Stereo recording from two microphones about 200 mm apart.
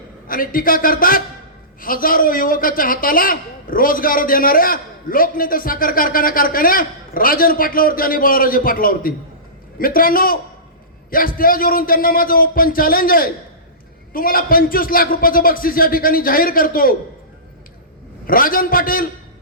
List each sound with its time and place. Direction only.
0.3 s a man's voice: 45° left (ahead or behind)
18.3 s a man's voice: 45° left (ahead or behind)